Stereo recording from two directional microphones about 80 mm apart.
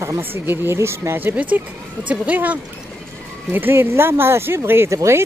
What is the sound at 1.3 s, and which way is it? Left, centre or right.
A woman's voice, centre.